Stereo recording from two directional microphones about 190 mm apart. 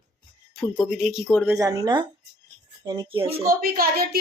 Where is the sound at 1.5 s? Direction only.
15° right (ahead or behind).